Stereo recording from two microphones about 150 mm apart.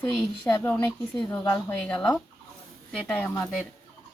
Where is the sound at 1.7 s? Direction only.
10° left (ahead or behind).